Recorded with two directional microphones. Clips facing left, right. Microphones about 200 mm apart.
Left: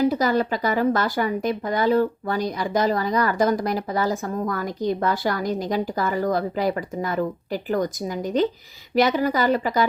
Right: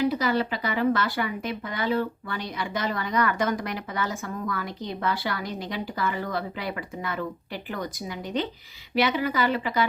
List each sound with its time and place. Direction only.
0.0 s speech: 40° left (ahead or behind)